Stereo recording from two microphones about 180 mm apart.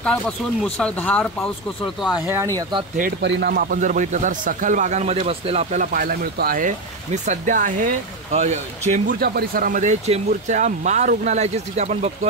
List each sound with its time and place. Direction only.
0.7 s speech: 5° left (ahead or behind)
2.2 s speech: 15° right (ahead or behind)
3.2 s speech: 70° right (ahead or behind); by 9.0 s 40° right (ahead or behind)
9.2 s speech: 55° right (ahead or behind); by 12.3 s 40° right (ahead or behind)